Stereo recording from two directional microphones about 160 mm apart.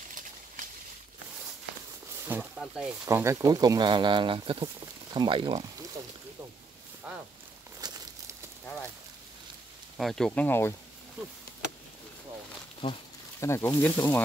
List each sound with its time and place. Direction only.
0.1 s a sound: 55° right (ahead or behind)
2.2 s speech: 15° right (ahead or behind)
3.1 s speech: 20° right (ahead or behind)
7.8 s a sound: 25° right (ahead or behind)
9.9 s speech: centre (ahead or behind)
12.8 s speech: 40° left (ahead or behind)
13.4 s speech: 15° left (ahead or behind)